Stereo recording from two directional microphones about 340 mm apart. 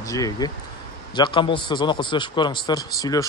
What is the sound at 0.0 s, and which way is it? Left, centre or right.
A man's voice, centre.